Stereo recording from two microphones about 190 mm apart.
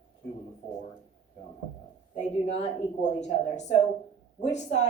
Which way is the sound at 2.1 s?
35° left (ahead or behind).